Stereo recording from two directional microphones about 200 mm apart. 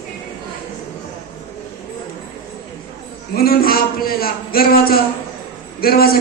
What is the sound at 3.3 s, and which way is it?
A woman's voice, 50° left (ahead or behind).